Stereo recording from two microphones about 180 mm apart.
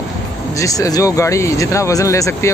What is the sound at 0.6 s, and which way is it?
Speech, 20° left (ahead or behind).